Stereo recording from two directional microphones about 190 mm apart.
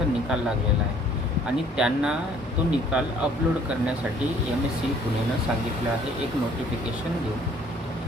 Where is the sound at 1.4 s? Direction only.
5° right (ahead or behind).